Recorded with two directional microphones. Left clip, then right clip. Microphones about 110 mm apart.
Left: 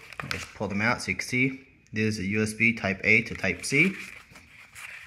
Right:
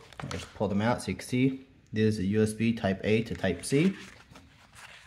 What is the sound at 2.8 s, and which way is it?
Speech, 15° right (ahead or behind).